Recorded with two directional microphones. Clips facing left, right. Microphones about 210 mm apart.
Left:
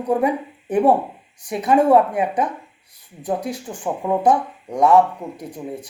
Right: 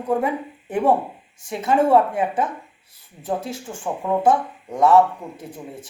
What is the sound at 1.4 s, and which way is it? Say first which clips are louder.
Speech: left 3 dB; 15° left (ahead or behind).